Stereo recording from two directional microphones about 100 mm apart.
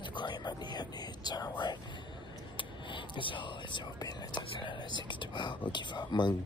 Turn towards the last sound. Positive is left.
turn(degrees=45)  # may be behind; listen again after turning